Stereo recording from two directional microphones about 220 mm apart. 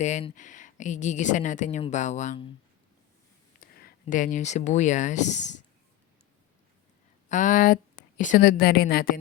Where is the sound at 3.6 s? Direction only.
40° left (ahead or behind).